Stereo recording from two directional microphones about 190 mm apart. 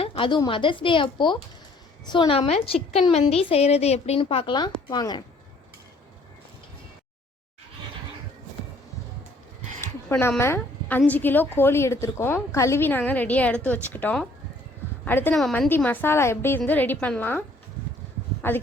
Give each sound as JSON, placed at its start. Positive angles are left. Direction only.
{"t": 0.0, "sound": "a woman's voice", "side_deg": 25}
{"t": 9.8, "sound": "a woman's voice", "side_deg": 10}